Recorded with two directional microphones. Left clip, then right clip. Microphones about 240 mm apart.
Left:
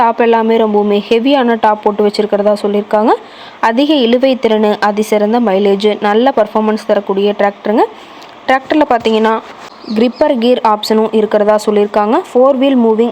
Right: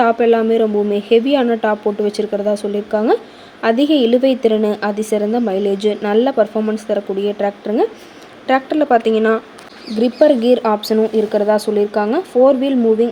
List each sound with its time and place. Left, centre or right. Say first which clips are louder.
0.0 s a woman's voice: left 3 dB; centre